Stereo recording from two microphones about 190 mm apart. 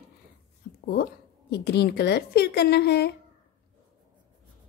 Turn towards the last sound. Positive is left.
turn(degrees=60)  # may be behind; listen again after turning